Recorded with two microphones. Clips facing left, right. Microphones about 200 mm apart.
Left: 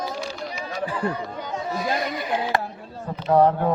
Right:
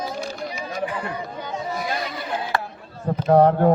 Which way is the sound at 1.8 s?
20° left (ahead or behind).